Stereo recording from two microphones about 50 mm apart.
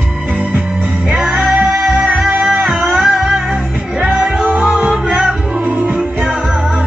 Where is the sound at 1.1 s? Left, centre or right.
Centre.